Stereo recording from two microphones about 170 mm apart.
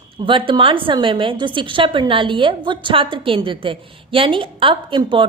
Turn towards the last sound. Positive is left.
turn(degrees=-30)  # may be behind; listen again after turning